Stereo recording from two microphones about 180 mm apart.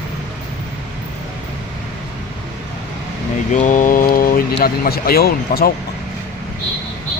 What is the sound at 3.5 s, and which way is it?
Speech, 45° left (ahead or behind).